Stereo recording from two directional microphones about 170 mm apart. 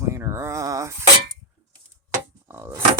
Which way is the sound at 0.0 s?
15° right (ahead or behind).